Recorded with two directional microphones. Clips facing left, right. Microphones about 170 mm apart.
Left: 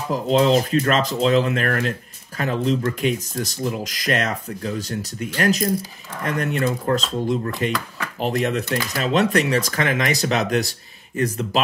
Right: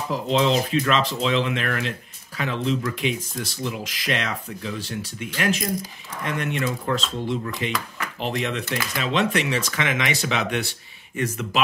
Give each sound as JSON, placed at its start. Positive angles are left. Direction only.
{"t": 0.1, "sound": "speech", "side_deg": 45}